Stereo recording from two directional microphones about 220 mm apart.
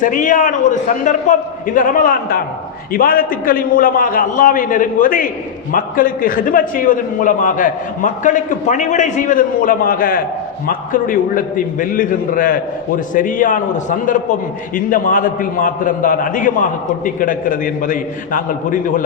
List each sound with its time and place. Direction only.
0.0 s a man's voice: 35° left (ahead or behind)